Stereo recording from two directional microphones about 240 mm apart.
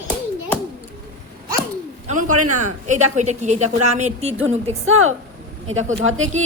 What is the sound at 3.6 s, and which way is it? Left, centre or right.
Speech, right.